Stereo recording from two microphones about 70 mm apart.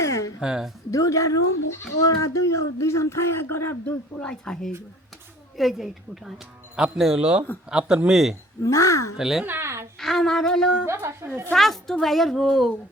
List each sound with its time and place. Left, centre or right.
0.0 s a sound: left
0.3 s a woman's voice: centre
0.9 s speech: left
3.8 s speech: centre
5.5 s a woman's voice: centre
8.6 s speech: left
9.1 s speech: centre
9.4 s babbling: right
10.0 s speech: centre
11.1 s a woman's voice: right
11.5 s a woman's voice: centre